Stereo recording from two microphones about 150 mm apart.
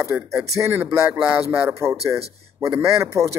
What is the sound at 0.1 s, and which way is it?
Speech, 10° right (ahead or behind).